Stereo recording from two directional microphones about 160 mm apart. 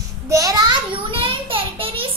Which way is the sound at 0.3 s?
20° right (ahead or behind).